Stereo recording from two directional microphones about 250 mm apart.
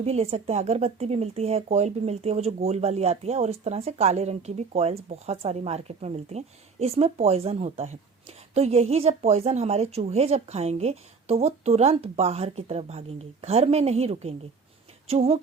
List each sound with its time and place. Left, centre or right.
0.0 s speech: right